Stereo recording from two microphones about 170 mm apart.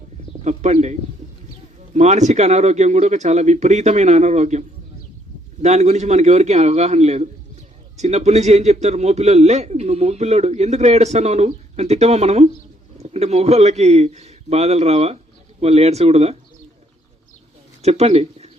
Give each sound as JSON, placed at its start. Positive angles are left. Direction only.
{"t": 0.4, "sound": "speech", "side_deg": -40}
{"t": 5.6, "sound": "a man's voice", "side_deg": -40}
{"t": 17.8, "sound": "speech", "side_deg": -40}